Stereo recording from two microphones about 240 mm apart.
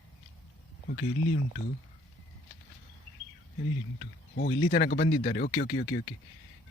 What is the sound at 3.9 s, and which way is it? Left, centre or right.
A man's voice, left.